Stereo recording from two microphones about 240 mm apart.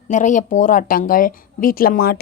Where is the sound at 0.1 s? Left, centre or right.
Left.